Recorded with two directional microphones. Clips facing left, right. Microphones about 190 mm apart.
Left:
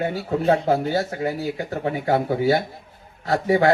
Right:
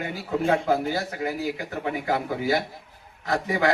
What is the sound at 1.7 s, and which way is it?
A man's voice, 35° left (ahead or behind).